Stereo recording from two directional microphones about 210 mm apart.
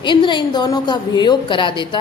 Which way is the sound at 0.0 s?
20° left (ahead or behind).